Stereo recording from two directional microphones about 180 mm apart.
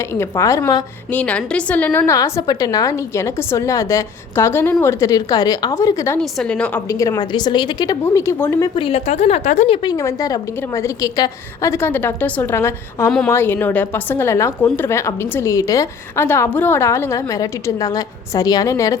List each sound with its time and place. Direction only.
0.0 s a woman's voice: 15° left (ahead or behind)
1.1 s a woman's voice: 5° left (ahead or behind)
6.1 s a woman's voice: 5° left (ahead or behind)
6.8 s a woman's voice: 15° left (ahead or behind)
8.7 s a woman's voice: 30° left (ahead or behind); by 13.1 s 15° left (ahead or behind)
13.1 s a woman's voice: 5° left (ahead or behind); by 18.9 s 20° left (ahead or behind)